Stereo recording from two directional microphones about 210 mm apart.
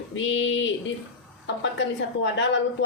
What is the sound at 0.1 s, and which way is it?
A woman's voice, 65° left (ahead or behind).